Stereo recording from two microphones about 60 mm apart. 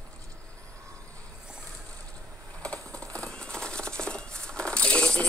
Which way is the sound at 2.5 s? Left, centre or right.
Centre.